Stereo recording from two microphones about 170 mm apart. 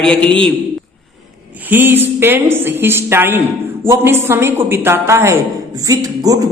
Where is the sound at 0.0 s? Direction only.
5° left (ahead or behind).